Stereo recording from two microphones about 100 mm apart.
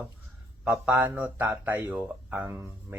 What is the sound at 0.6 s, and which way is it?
Speech, 15° right (ahead or behind).